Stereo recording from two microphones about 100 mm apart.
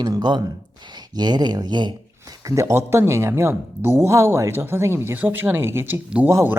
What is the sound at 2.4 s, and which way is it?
Speech, 30° right (ahead or behind).